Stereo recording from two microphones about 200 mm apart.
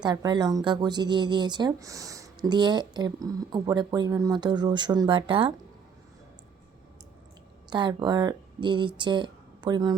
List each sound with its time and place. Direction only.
0.0 s speech: 20° right (ahead or behind)
7.7 s speech: 20° right (ahead or behind)